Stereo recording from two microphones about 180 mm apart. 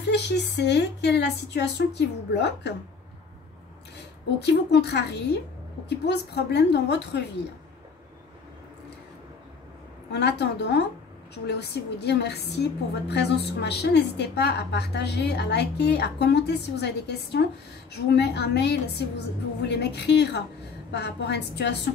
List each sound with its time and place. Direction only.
0.0 s a woman's voice: 70° left (ahead or behind)
4.4 s a woman's voice: 70° left (ahead or behind)
10.1 s a woman's voice: 70° left (ahead or behind)